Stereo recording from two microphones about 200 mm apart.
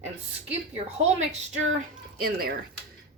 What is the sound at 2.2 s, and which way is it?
Speech, 50° right (ahead or behind).